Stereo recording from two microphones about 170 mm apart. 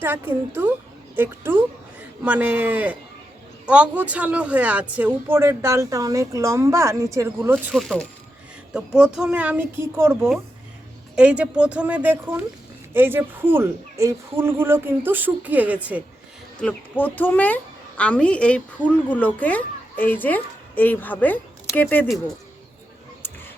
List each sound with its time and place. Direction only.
0.0 s speech: 15° right (ahead or behind)
7.7 s speech: centre (ahead or behind)
16.6 s a woman's voice: 10° left (ahead or behind)